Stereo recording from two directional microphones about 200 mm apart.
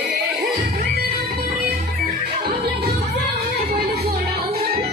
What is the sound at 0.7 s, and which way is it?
Music, 50° right (ahead or behind).